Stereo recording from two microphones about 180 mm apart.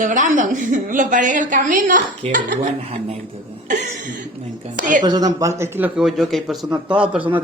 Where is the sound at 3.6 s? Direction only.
45° right (ahead or behind).